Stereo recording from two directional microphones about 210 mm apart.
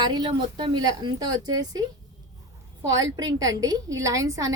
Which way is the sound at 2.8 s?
15° right (ahead or behind).